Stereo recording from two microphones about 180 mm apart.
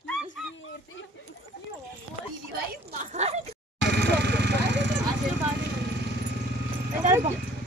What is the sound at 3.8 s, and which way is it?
Vehicle, 65° right (ahead or behind).